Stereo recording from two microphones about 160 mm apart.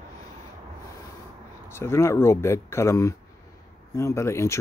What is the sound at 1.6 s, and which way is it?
Speech, 15° left (ahead or behind).